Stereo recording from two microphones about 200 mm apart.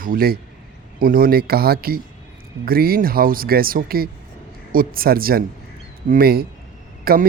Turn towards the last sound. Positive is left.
turn(degrees=-50)  # may be behind; listen again after turning